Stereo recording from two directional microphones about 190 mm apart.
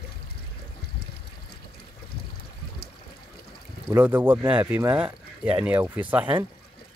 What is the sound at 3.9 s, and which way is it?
Speech, 10° right (ahead or behind).